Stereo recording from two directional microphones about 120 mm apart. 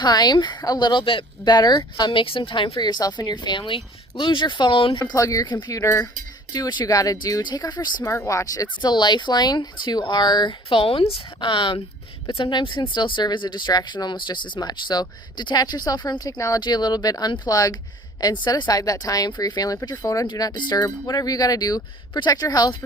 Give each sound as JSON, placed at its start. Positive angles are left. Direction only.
{"t": 0.0, "sound": "speech", "side_deg": 35}
{"t": 5.1, "sound": "speech", "side_deg": 30}
{"t": 8.0, "sound": "speech", "side_deg": 25}